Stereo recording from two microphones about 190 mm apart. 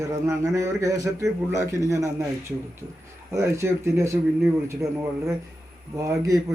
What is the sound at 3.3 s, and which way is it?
Speech, 15° right (ahead or behind).